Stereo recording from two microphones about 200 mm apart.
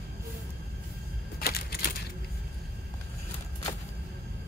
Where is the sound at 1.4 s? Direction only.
50° left (ahead or behind).